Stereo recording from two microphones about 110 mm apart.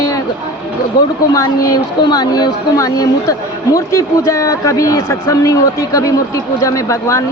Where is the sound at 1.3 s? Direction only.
35° left (ahead or behind).